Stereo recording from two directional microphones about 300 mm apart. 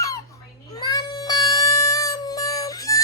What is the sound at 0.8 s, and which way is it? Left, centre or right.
Music, centre.